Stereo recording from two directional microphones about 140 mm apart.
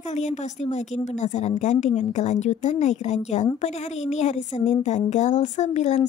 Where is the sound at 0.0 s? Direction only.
55° left (ahead or behind).